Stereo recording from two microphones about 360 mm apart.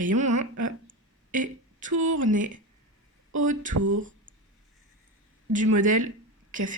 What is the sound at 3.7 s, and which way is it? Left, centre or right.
Speech, right.